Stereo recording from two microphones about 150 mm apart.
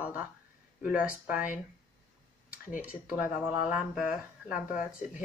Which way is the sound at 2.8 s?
10° right (ahead or behind).